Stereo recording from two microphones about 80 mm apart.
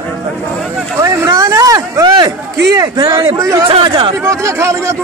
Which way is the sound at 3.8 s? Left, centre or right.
Right.